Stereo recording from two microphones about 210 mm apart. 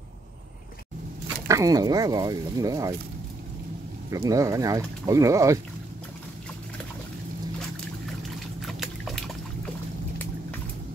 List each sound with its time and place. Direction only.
1.5 s speech: 15° right (ahead or behind)
4.1 s speech: 15° right (ahead or behind)
8.5 s trickle: centre (ahead or behind)